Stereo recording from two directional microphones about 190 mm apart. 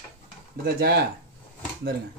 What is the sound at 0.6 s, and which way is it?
Speech, 55° right (ahead or behind).